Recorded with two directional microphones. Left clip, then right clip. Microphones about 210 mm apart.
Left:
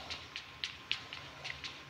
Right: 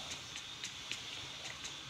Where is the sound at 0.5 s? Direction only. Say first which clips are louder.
Left 4 dB; centre (ahead or behind).